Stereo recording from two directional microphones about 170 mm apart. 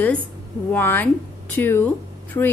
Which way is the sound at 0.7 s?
10° left (ahead or behind).